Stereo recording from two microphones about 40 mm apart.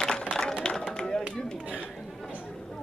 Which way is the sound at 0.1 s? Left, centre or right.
Centre.